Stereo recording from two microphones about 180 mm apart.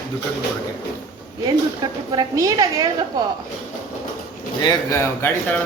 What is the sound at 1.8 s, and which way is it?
A woman's voice, 20° right (ahead or behind).